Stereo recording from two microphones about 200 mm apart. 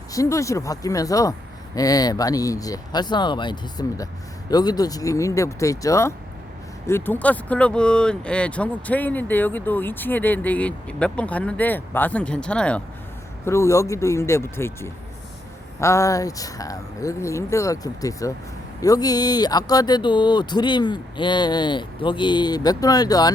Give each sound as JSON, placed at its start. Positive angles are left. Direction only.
{"t": 0.1, "sound": "speech", "side_deg": 15}